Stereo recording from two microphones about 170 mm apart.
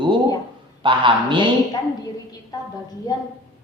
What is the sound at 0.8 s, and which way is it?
Speech, 30° right (ahead or behind).